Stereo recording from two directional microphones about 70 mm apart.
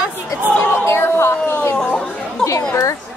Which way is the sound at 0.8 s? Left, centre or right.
Left.